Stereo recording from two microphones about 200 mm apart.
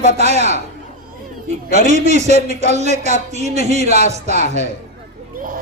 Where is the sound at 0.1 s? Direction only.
35° right (ahead or behind).